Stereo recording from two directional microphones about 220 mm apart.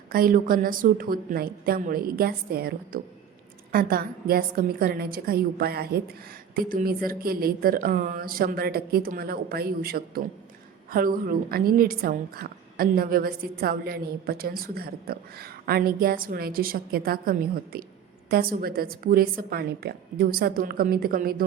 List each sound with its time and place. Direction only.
0.1 s a woman's voice: 40° right (ahead or behind)